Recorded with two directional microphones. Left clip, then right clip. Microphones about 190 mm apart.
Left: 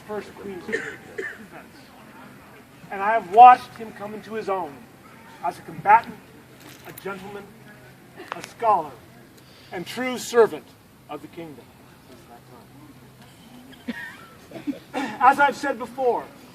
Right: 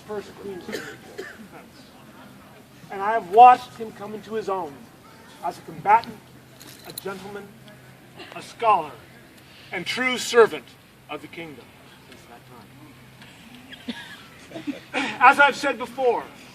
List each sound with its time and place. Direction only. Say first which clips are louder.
0.1 s speech: left 1 dB; 5° left (ahead or behind)
2.9 s speech: left 1 dB; 15° left (ahead or behind)
8.5 s speech: right 1 dB; 5° left (ahead or behind)
14.9 s speech: right 2 dB; 20° left (ahead or behind)